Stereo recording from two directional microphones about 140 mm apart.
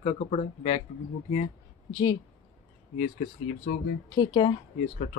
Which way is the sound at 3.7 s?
85° left.